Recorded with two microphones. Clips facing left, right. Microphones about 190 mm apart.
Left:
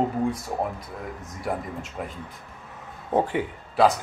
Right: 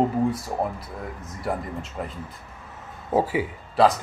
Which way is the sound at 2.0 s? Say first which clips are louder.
Right 1 dB; 5° left (ahead or behind).